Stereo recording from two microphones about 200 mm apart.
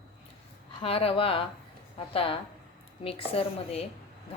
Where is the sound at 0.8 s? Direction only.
30° left (ahead or behind).